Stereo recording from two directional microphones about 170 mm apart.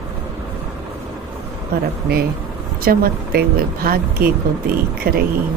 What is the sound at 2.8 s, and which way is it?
Speech, 65° right (ahead or behind).